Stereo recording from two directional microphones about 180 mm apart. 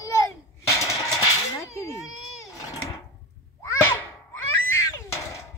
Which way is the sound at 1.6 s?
15° left (ahead or behind).